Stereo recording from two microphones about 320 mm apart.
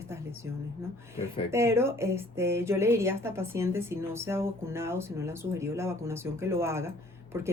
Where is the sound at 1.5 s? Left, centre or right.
Centre.